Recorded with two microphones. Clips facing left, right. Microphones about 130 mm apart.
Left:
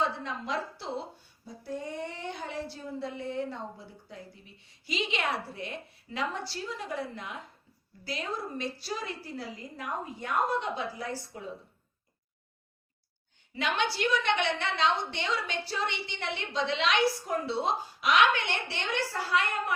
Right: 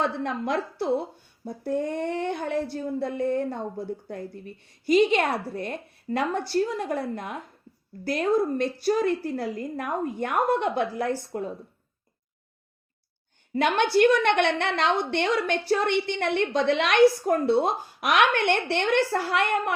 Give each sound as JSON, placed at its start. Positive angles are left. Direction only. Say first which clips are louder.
{"t": 0.0, "sound": "a woman's voice", "louder": "right 5 dB", "side_deg": -55}
{"t": 13.5, "sound": "a woman's voice", "louder": "right 8 dB", "side_deg": -55}